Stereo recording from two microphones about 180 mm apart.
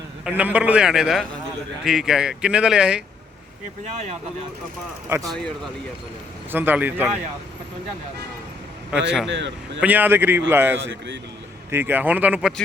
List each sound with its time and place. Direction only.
0.3 s speech: 5° right (ahead or behind)
5.0 s speech: 15° right (ahead or behind)
6.5 s speech: 10° right (ahead or behind)
8.9 s speech: 5° right (ahead or behind)
9.2 s speech: 80° right
9.8 s speech: 10° right (ahead or behind)
10.8 s speech: 80° right
11.7 s speech: 10° right (ahead or behind)